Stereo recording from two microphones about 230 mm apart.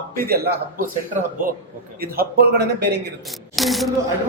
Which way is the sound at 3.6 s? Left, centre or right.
Centre.